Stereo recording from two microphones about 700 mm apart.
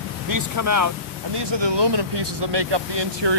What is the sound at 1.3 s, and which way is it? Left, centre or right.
Speech, right.